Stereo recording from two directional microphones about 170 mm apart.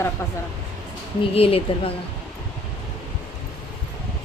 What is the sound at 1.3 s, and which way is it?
Speech, 35° left (ahead or behind).